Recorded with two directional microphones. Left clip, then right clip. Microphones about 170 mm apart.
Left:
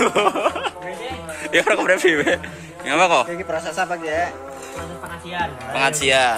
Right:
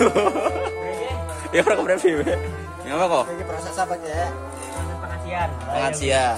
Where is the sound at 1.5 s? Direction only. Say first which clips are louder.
Left 2 dB; centre (ahead or behind).